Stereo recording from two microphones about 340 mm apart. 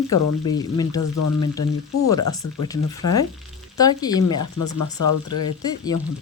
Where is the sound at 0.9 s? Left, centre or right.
Left.